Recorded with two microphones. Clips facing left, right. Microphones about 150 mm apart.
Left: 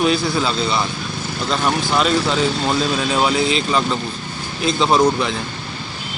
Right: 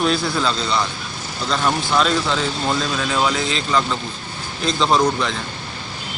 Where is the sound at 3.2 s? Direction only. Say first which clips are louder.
Left 3 dB; 15° left (ahead or behind).